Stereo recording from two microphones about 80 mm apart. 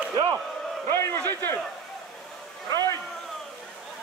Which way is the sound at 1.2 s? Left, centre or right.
Left.